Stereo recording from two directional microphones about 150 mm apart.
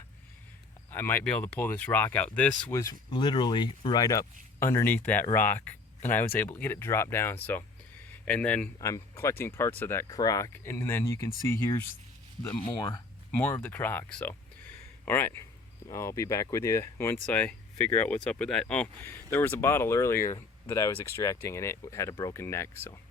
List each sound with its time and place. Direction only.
0.9 s speech: 15° left (ahead or behind)
3.1 s speech: 30° left (ahead or behind); by 11.9 s 15° left (ahead or behind)
13.3 s speech: 10° left (ahead or behind)